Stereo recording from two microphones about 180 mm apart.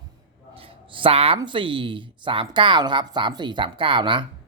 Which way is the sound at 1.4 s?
25° right (ahead or behind).